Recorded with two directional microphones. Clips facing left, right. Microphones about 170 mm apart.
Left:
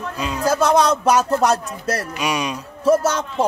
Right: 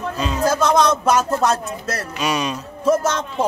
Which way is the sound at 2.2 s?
15° left (ahead or behind).